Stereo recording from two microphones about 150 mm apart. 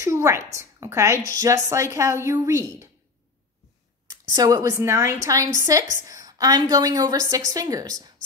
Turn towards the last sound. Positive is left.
turn(degrees=-25)  # may be behind; listen again after turning